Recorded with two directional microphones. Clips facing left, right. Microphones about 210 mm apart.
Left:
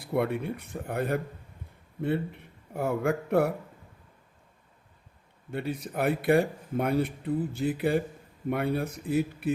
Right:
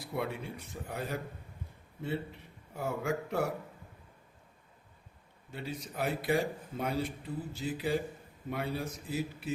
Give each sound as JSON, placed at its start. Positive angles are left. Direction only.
{"t": 0.0, "sound": "a man's voice", "side_deg": 60}
{"t": 5.5, "sound": "a man's voice", "side_deg": 60}